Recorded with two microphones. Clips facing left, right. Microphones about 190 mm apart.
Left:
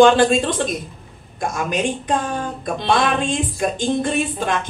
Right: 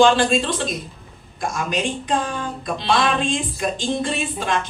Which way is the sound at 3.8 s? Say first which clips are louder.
Left 5 dB; 55° left (ahead or behind).